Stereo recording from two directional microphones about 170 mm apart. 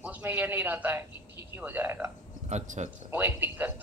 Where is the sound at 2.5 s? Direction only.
40° right (ahead or behind).